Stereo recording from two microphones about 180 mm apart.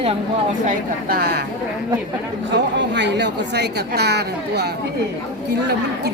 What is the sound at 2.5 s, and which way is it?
A woman's voice, 75° right (ahead or behind).